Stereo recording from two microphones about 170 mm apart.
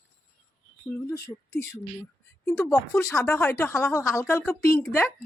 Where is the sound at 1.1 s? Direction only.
15° left (ahead or behind).